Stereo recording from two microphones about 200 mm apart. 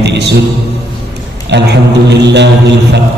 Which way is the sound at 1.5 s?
60° right (ahead or behind).